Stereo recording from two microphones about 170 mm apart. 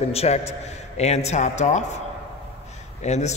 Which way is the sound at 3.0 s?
40° left (ahead or behind).